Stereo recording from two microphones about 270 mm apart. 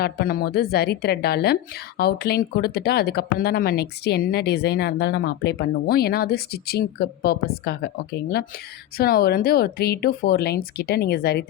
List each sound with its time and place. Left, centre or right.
0.0 s a woman's voice: left